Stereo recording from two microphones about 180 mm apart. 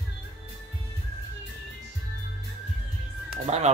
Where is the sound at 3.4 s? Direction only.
35° right (ahead or behind).